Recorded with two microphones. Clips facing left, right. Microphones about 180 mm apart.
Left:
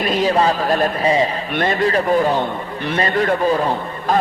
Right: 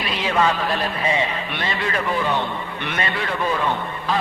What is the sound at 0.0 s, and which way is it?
A man's voice, 45° left (ahead or behind).